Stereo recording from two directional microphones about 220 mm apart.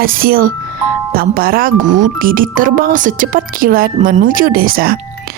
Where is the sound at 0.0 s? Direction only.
40° right (ahead or behind).